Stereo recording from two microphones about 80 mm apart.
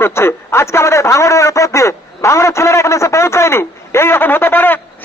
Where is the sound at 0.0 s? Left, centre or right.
Left.